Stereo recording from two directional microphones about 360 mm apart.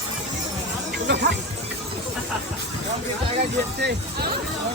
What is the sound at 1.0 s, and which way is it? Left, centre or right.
Music, right.